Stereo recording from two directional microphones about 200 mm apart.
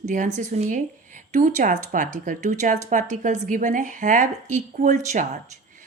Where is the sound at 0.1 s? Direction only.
40° right (ahead or behind).